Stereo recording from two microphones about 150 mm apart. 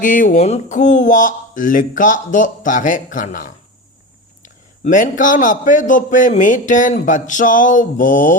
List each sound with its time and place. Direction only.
0.0 s a man's voice: 60° left (ahead or behind)